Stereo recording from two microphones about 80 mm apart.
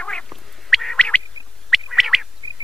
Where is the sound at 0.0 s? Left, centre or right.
Centre.